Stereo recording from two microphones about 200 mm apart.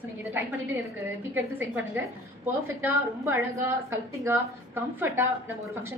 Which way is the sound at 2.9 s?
10° right (ahead or behind).